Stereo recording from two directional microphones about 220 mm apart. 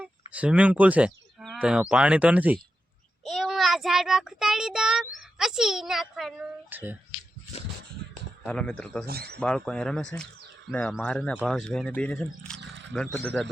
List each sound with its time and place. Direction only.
0.0 s a child's voice: 5° right (ahead or behind)
8.4 s speech: 5° left (ahead or behind)
9.0 s speech: 45° right (ahead or behind)
9.4 s speech: 5° left (ahead or behind)